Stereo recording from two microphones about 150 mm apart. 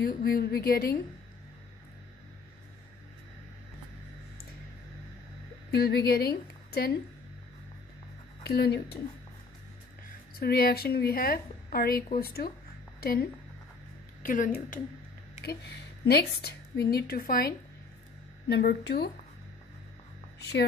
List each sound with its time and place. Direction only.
0.2 s a woman's voice: 90° left
5.7 s a woman's voice: 90° left
8.5 s a woman's voice: 90° left
10.4 s a woman's voice: 90° left
14.2 s speech: 65° left (ahead or behind)
16.1 s a woman's voice: 90° left
16.9 s a woman's voice: 80° left